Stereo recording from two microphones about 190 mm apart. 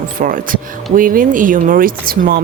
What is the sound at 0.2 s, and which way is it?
Speech, 45° right (ahead or behind).